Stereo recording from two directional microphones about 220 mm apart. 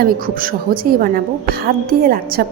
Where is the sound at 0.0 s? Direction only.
40° right (ahead or behind).